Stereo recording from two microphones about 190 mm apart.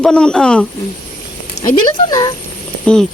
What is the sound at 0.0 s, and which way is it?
Speech, 5° left (ahead or behind).